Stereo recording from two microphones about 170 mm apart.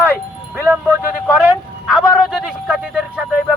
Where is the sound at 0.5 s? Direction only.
15° right (ahead or behind).